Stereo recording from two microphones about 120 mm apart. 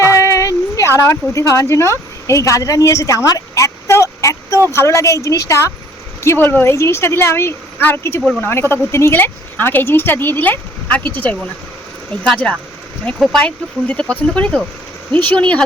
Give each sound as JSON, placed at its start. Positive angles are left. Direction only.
{"t": 0.0, "sound": "a woman's voice", "side_deg": 25}
{"t": 13.1, "sound": "speech", "side_deg": 0}
{"t": 13.4, "sound": "speech", "side_deg": 10}